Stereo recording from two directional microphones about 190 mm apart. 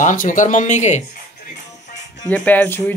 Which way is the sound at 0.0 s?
45° left (ahead or behind).